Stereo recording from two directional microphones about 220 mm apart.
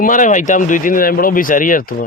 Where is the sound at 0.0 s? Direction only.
35° left (ahead or behind).